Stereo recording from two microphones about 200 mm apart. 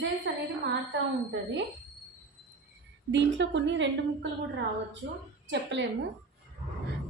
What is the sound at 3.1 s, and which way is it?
A woman's voice, 60° right (ahead or behind).